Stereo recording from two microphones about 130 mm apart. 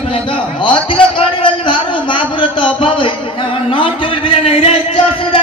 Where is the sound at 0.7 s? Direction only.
40° left (ahead or behind).